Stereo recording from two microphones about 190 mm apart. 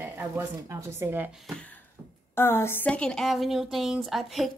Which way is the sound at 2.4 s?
10° left (ahead or behind).